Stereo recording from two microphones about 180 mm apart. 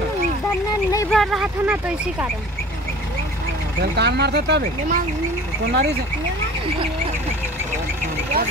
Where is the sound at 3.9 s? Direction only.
65° right (ahead or behind).